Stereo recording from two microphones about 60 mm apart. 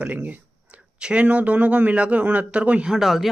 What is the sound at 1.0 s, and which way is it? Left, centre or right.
Speech, centre.